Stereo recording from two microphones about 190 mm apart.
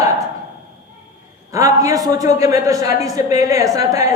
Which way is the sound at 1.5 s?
15° right (ahead or behind).